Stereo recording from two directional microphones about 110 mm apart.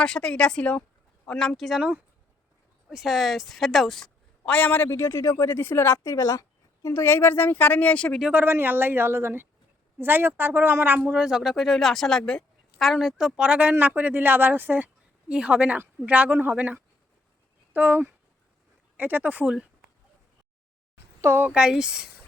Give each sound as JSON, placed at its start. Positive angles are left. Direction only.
{"t": 0.0, "sound": "a woman's voice", "side_deg": 10}
{"t": 2.9, "sound": "speech", "side_deg": -5}
{"t": 4.4, "sound": "a woman's voice", "side_deg": 15}
{"t": 6.8, "sound": "a woman's voice", "side_deg": 20}
{"t": 8.2, "sound": "speech", "side_deg": -15}
{"t": 21.2, "sound": "speech", "side_deg": -20}
{"t": 21.5, "sound": "speech", "side_deg": -5}